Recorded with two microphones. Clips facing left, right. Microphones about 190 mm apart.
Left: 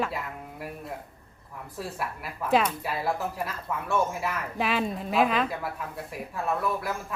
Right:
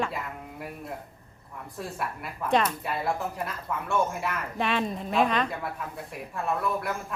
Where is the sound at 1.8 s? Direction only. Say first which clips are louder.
Even; 5° left (ahead or behind).